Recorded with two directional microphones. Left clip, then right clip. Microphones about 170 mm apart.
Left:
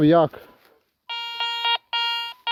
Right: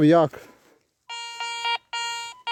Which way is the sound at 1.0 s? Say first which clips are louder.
Left 5 dB; 45° left (ahead or behind).